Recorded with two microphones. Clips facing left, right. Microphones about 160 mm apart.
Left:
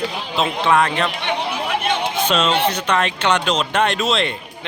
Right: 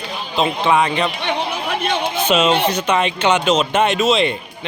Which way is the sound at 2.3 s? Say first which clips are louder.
Right 3 dB; 5° right (ahead or behind).